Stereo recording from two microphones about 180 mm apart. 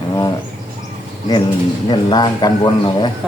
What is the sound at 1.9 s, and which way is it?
A man's voice, 25° left (ahead or behind).